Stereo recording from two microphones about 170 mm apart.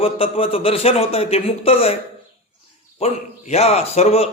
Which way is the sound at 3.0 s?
40° left (ahead or behind).